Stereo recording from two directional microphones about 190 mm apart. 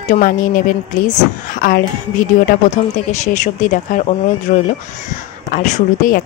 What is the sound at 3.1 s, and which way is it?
A woman's voice, 40° left (ahead or behind).